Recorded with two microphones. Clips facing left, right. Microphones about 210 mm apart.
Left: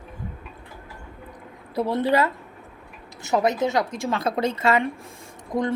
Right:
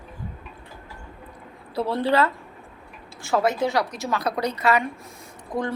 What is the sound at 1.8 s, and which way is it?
A woman's voice, 20° left (ahead or behind).